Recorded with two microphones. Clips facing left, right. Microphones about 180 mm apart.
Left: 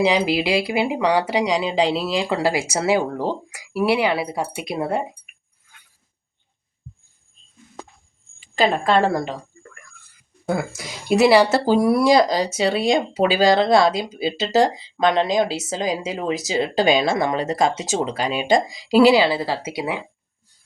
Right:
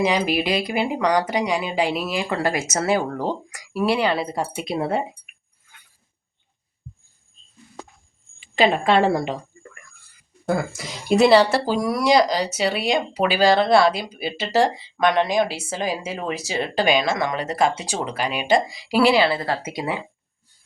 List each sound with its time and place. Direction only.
0.1 s speech: 15° left (ahead or behind)
8.6 s speech: 5° right (ahead or behind)
10.8 s speech: 5° left (ahead or behind)
11.7 s speech: 30° left (ahead or behind); by 20.0 s 5° left (ahead or behind)